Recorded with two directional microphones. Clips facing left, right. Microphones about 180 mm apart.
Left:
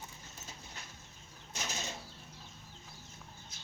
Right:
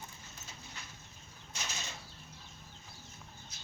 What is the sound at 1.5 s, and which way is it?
Bird flight, 45° left (ahead or behind).